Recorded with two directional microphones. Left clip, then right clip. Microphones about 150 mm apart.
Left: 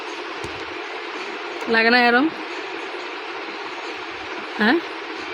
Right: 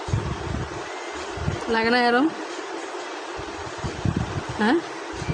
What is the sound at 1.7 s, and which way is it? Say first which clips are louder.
Speech: left 4 dB; 5° left (ahead or behind).